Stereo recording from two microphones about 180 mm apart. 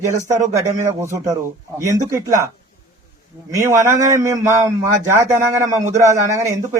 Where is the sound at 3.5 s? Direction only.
15° right (ahead or behind).